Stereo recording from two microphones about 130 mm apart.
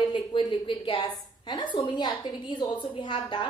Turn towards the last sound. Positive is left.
turn(degrees=35)  # may be behind; listen again after turning